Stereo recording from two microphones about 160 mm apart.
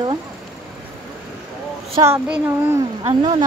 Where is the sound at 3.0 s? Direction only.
40° right (ahead or behind).